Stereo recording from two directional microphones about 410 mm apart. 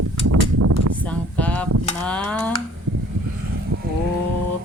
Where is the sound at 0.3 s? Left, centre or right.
Right.